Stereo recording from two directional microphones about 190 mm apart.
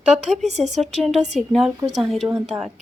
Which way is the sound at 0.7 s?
Centre (ahead or behind).